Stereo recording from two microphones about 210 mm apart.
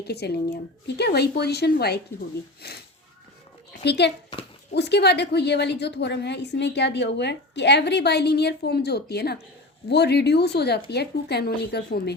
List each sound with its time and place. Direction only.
0.0 s a woman's voice: 50° left (ahead or behind)